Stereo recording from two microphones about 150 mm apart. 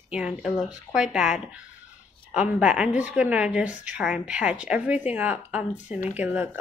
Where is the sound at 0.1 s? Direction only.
5° right (ahead or behind).